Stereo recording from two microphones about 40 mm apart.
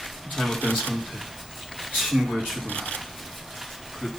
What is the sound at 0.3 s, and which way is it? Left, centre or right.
Speech, centre.